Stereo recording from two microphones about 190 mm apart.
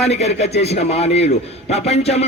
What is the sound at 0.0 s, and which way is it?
A man's voice, 35° left (ahead or behind).